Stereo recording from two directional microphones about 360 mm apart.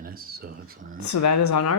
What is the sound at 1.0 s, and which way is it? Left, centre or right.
Speech, left.